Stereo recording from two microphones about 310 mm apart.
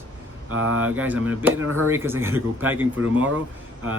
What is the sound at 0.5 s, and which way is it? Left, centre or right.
Speech, right.